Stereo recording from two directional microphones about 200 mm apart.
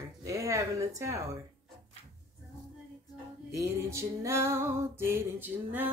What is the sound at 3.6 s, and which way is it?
Speech, 15° right (ahead or behind).